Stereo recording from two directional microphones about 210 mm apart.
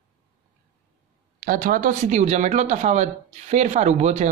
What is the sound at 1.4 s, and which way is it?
Speech, 40° right (ahead or behind).